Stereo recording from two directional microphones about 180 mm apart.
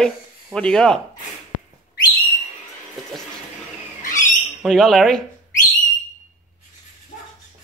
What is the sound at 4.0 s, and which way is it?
Squawk, 45° left (ahead or behind).